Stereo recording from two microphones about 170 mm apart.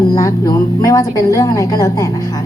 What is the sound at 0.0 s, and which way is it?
A woman's voice, 20° left (ahead or behind).